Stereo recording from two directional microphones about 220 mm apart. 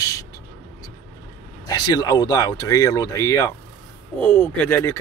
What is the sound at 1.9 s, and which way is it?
Speech, 15° left (ahead or behind).